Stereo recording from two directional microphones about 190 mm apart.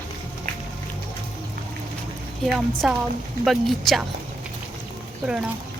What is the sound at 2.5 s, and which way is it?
Speech, centre (ahead or behind).